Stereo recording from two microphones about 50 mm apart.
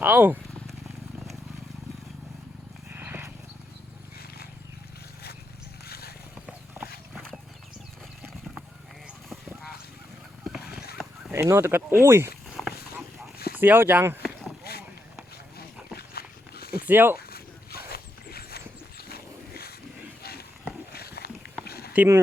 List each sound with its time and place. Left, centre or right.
0.0 s speech: right
2.9 s a sound: right
6.8 s horse: right
11.3 s speech: right
12.5 s a sound: centre
13.6 s speech: right
16.8 s speech: right
22.0 s speech: right